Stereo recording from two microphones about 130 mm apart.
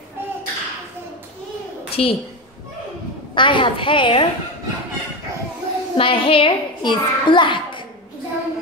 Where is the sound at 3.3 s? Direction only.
40° left (ahead or behind).